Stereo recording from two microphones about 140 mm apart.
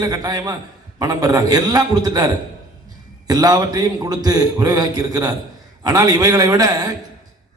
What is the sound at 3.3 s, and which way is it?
A man's voice, 25° right (ahead or behind).